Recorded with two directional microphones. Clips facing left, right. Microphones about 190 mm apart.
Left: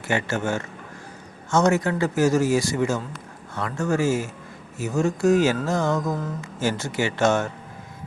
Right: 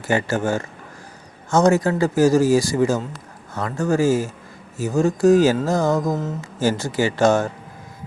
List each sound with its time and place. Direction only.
0.1 s a man's voice: 35° right (ahead or behind)